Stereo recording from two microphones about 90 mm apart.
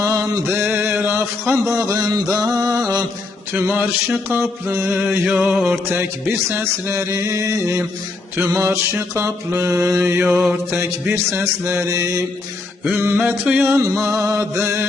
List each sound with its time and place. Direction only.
0.0 s a sound: 35° right (ahead or behind)
0.4 s a sound: 25° right (ahead or behind)
1.7 s a sound: 40° right (ahead or behind)
3.6 s mantra: 20° right (ahead or behind)
5.2 s music: 15° right (ahead or behind)
5.9 s mantra: 25° right (ahead or behind)
6.9 s music: 35° right (ahead or behind)
8.4 s mantra: 35° right (ahead or behind)
13.1 s music: 15° right (ahead or behind)
13.7 s music: 30° right (ahead or behind)